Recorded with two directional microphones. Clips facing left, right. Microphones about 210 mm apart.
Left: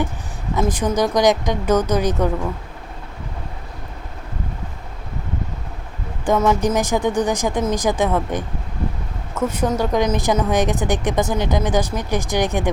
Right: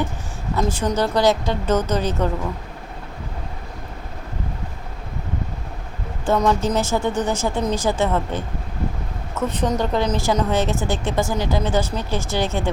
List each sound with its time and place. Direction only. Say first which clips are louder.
0.5 s a woman's voice: left 2 dB; 15° left (ahead or behind)
6.2 s a woman's voice: left 2 dB; 10° left (ahead or behind)